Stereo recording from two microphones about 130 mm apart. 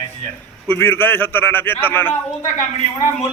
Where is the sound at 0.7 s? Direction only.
15° left (ahead or behind).